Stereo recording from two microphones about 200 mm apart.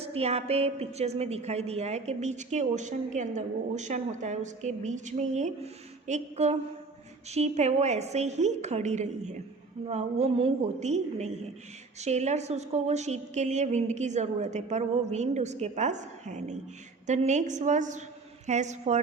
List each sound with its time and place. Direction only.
0.0 s a woman's voice: 30° right (ahead or behind)